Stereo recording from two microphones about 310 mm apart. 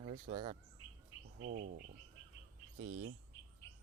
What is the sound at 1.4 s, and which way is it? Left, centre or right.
Speech, right.